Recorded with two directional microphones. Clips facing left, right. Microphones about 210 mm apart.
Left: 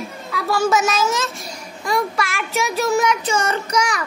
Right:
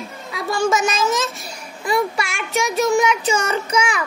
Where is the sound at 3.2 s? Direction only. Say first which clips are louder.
Right 1 dB; 10° right (ahead or behind).